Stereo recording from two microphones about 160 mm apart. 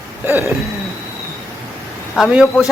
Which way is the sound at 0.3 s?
15° right (ahead or behind).